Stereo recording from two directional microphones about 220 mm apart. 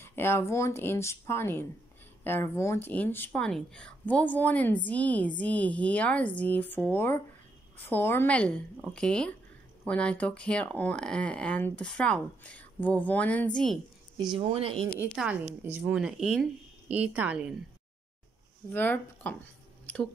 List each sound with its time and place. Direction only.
0.0 s speech: 10° left (ahead or behind)
14.3 s speech: 25° right (ahead or behind)
15.1 s speech: 5° right (ahead or behind)
18.7 s speech: 10° left (ahead or behind)